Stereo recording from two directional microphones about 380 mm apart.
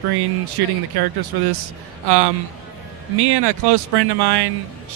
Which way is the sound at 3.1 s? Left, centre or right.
Right.